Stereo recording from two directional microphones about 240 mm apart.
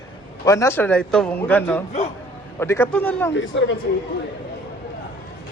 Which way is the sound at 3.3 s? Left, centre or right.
Left.